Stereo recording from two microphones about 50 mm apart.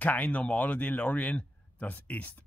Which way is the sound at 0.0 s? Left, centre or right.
Left.